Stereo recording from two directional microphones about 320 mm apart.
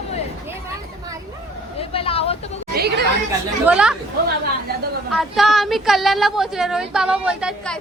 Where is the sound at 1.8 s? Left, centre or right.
Centre.